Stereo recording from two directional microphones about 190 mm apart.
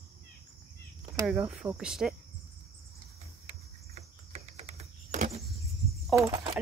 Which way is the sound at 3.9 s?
35° right (ahead or behind).